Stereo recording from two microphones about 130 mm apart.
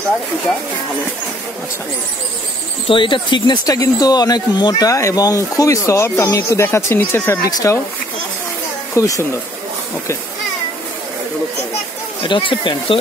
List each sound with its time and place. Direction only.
2.9 s speech: 40° left (ahead or behind)
8.9 s speech: 25° left (ahead or behind)
12.2 s speech: 40° left (ahead or behind)